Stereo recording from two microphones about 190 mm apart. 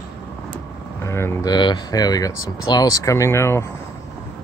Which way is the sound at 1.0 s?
15° left (ahead or behind).